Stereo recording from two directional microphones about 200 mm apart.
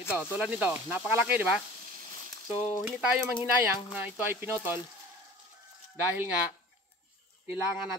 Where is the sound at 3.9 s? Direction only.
10° right (ahead or behind).